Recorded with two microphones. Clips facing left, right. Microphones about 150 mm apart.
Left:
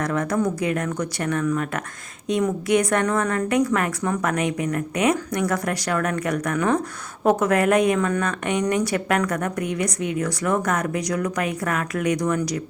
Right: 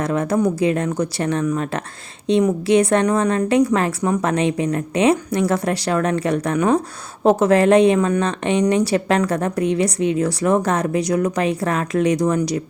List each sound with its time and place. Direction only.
0.0 s a woman's voice: 25° right (ahead or behind)